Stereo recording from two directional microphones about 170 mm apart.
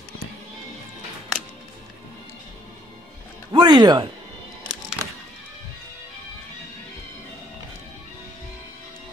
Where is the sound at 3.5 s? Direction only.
25° right (ahead or behind).